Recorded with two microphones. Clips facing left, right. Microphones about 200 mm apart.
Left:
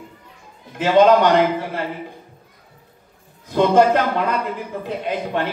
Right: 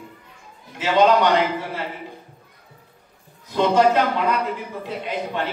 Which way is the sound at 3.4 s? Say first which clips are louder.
Left 3 dB; 55° left (ahead or behind).